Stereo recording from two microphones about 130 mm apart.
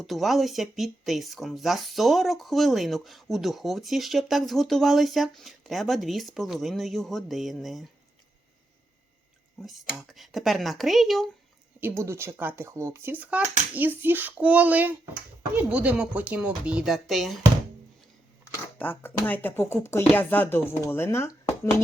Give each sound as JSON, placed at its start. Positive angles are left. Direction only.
{"t": 0.0, "sound": "speech", "side_deg": 0}
{"t": 9.6, "sound": "speech", "side_deg": 0}
{"t": 11.8, "sound": "speech", "side_deg": -20}
{"t": 18.8, "sound": "speech", "side_deg": 15}